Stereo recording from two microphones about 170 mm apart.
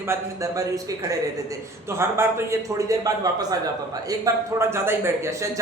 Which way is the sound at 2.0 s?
15° right (ahead or behind).